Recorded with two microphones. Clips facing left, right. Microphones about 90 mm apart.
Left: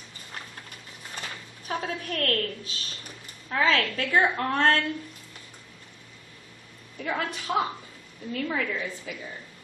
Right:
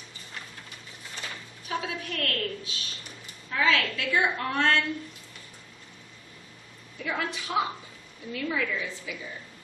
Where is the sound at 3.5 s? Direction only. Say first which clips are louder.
Left 1 dB; 40° left (ahead or behind).